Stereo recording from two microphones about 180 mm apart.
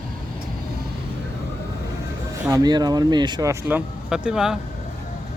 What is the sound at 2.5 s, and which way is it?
Speech, 20° right (ahead or behind).